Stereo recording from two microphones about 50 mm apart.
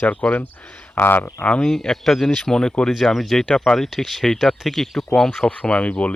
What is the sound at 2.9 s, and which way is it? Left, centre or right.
Speech, centre.